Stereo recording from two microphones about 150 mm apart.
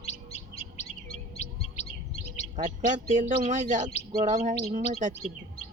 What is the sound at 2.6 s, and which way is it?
Speech, 55° right (ahead or behind).